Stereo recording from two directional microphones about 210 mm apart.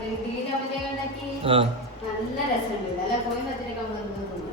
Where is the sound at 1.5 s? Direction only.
25° right (ahead or behind).